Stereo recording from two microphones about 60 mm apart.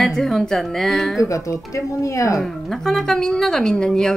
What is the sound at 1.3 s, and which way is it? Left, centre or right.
Speech, left.